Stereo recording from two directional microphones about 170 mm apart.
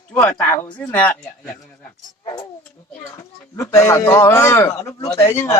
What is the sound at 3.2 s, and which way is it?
Speech, 15° left (ahead or behind).